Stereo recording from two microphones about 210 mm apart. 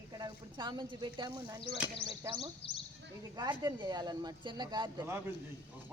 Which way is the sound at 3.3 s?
20° right (ahead or behind).